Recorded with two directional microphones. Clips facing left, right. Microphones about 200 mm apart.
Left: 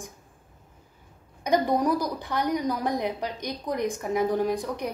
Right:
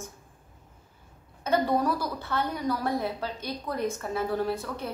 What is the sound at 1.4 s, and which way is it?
A woman's voice, 15° left (ahead or behind).